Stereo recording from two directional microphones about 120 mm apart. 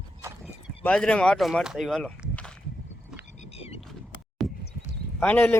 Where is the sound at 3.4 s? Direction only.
55° left (ahead or behind).